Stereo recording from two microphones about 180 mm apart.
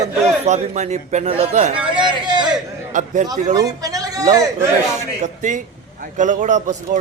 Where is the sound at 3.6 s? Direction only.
20° right (ahead or behind).